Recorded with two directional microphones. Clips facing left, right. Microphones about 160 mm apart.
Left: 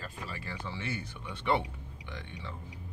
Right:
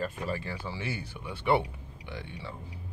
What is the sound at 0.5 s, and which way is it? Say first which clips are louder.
Speech: right 2 dB; 10° right (ahead or behind).